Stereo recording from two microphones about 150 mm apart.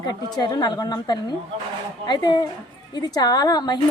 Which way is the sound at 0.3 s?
30° left (ahead or behind).